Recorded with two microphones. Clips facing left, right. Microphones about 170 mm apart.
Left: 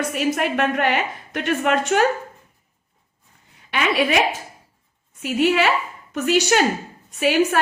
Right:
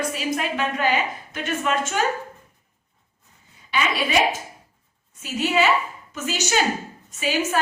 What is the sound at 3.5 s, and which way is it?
Speech, 65° left (ahead or behind).